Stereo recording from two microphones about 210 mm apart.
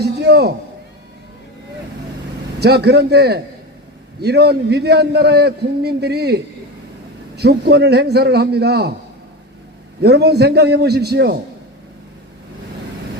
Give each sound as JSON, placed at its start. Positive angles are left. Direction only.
{"t": 0.0, "sound": "a man's voice", "side_deg": -50}
{"t": 2.6, "sound": "a man's voice", "side_deg": -50}
{"t": 10.0, "sound": "a man's voice", "side_deg": -50}